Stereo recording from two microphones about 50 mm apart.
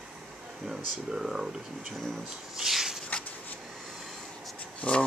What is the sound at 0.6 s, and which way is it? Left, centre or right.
Speech, centre.